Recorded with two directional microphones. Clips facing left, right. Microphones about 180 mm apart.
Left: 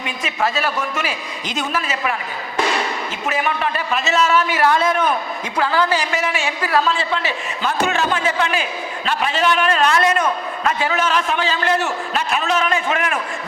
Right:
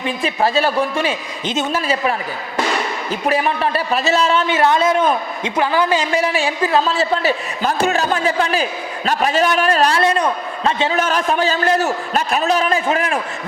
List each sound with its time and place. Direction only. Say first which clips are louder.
0.0 s a man's voice: right 4 dB; 35° right (ahead or behind)
3.2 s a man's voice: right 4 dB; 35° right (ahead or behind); by 6.1 s 20° right (ahead or behind)
6.1 s a man's voice: right 4 dB; 35° right (ahead or behind)
7.0 s a man's voice: right 5 dB; 40° right (ahead or behind)
11.0 s a man's voice: right 2 dB; 40° right (ahead or behind)